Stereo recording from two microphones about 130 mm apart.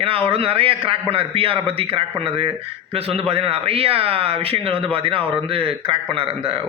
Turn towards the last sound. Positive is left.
turn(degrees=-45)  # may be behind; listen again after turning